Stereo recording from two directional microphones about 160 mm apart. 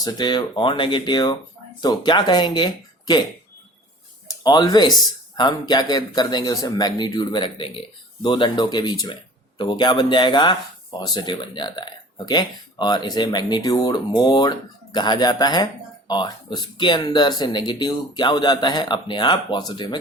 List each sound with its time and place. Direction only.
0.0 s speech: 25° left (ahead or behind)
4.3 s speech: 25° left (ahead or behind)